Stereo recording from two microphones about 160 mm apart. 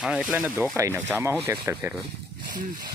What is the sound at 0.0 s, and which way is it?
Speech, 5° right (ahead or behind).